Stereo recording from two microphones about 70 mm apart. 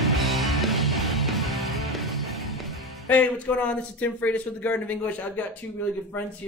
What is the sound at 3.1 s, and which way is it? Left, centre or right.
Speech, left.